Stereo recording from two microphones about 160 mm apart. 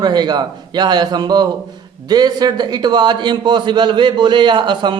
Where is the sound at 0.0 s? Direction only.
25° right (ahead or behind).